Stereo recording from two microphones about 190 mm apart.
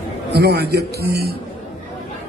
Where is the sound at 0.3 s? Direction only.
60° right (ahead or behind).